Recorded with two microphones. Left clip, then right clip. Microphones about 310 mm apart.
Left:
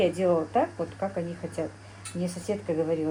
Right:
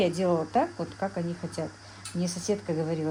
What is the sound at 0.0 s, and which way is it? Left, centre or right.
Speech, right.